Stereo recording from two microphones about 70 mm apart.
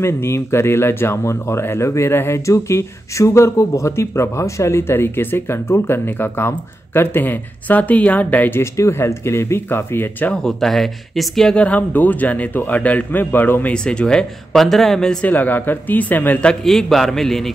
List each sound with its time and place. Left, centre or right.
0.0 s speech: left
8.5 s speech: left
10.3 s speech: centre
11.5 s a man's voice: centre
13.8 s speech: centre
15.2 s a man's voice: left
16.6 s speech: centre